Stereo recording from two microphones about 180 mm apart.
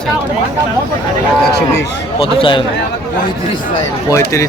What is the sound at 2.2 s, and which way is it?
Speech, 30° left (ahead or behind).